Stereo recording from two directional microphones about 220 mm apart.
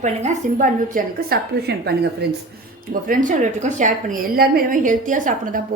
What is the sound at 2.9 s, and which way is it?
A woman's voice, 40° right (ahead or behind).